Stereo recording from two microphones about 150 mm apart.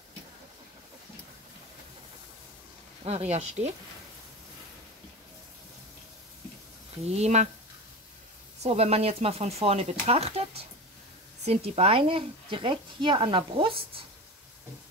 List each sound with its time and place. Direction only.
3.3 s speech: 45° right (ahead or behind)
7.1 s speech: 45° right (ahead or behind)
8.6 s speech: 45° right (ahead or behind)